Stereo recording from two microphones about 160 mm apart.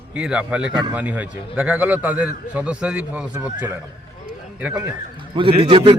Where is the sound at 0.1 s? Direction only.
5° right (ahead or behind).